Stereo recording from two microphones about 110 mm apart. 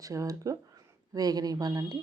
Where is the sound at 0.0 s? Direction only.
30° right (ahead or behind).